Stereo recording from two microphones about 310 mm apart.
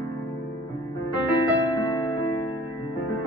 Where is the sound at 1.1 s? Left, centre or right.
Centre.